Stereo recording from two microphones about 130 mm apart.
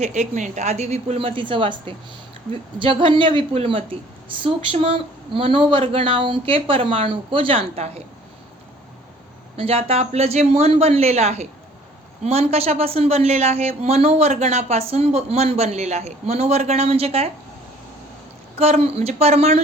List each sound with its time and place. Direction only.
0.0 s a woman's voice: 65° right (ahead or behind); by 8.0 s 50° right (ahead or behind)
9.6 s a woman's voice: 45° right (ahead or behind)
18.6 s a woman's voice: 55° right (ahead or behind)